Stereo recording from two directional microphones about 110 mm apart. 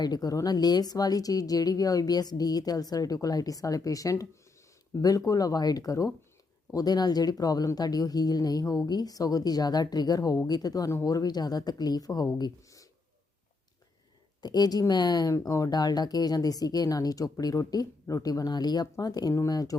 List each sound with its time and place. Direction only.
0.0 s speech: 35° left (ahead or behind)
14.4 s speech: 35° left (ahead or behind)